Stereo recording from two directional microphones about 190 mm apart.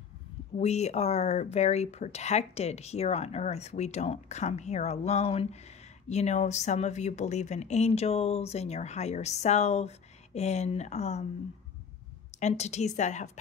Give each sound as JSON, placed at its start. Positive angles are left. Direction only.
{"t": 0.6, "sound": "speech", "side_deg": 35}
{"t": 12.4, "sound": "speech", "side_deg": 35}